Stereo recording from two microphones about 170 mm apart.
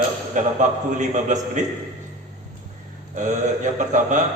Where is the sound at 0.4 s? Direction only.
45° right (ahead or behind).